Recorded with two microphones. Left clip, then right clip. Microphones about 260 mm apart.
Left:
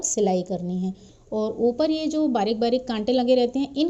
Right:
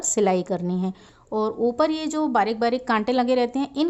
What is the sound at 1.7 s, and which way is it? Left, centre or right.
A woman's voice, centre.